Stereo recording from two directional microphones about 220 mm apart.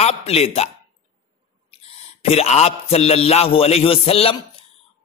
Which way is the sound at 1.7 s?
25° left (ahead or behind).